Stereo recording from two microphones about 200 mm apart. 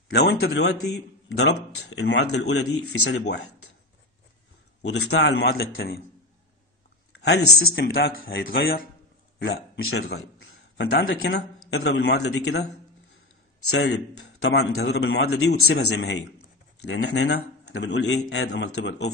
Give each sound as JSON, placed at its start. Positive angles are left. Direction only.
{"t": 0.1, "sound": "a man's voice", "side_deg": 55}
{"t": 4.8, "sound": "a man's voice", "side_deg": 60}
{"t": 7.1, "sound": "speech", "side_deg": 55}
{"t": 9.4, "sound": "a man's voice", "side_deg": 65}
{"t": 11.1, "sound": "a man's voice", "side_deg": 70}
{"t": 13.8, "sound": "a man's voice", "side_deg": 75}